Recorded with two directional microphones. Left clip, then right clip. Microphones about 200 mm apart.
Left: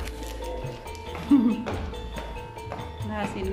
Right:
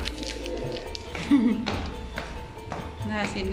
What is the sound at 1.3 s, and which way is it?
Speech, 5° left (ahead or behind).